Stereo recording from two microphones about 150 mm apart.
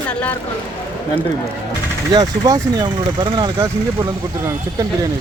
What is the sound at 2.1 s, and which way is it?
Speech, 25° right (ahead or behind).